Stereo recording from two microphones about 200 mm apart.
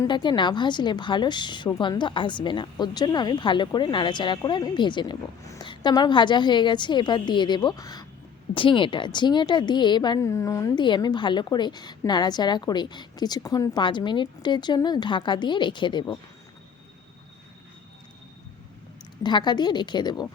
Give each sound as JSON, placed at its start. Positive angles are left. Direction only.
{"t": 0.0, "sound": "a woman's voice", "side_deg": 20}
{"t": 19.2, "sound": "a woman's voice", "side_deg": 20}